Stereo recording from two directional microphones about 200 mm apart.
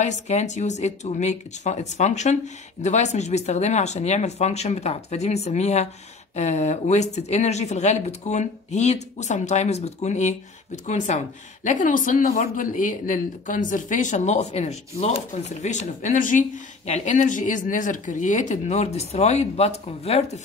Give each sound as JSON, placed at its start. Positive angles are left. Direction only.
{"t": 0.0, "sound": "speech", "side_deg": 35}